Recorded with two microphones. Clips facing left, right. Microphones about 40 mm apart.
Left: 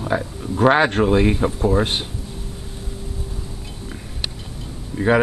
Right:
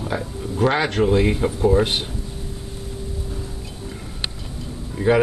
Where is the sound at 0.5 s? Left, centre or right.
Left.